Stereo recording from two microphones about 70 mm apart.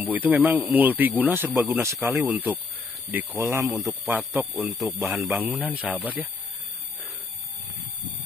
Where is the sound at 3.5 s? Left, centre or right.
Right.